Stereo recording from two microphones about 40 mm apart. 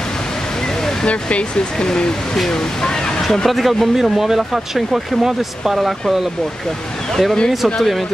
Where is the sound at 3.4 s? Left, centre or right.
Centre.